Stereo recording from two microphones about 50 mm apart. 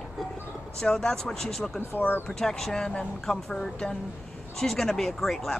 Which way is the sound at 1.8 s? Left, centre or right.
Left.